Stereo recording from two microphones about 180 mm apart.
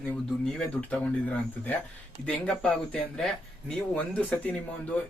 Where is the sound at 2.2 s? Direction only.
5° left (ahead or behind).